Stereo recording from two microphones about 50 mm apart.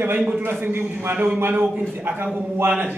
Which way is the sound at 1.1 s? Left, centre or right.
Right.